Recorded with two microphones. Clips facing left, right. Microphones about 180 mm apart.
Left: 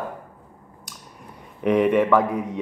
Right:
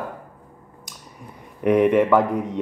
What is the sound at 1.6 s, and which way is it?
Speech, 5° right (ahead or behind).